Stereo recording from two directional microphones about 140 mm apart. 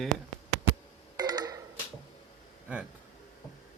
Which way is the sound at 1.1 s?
30° right (ahead or behind).